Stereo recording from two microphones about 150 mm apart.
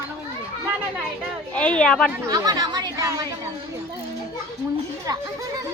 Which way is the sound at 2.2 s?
25° right (ahead or behind).